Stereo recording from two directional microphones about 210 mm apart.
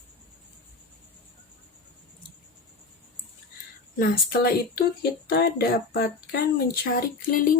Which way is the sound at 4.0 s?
45° left (ahead or behind).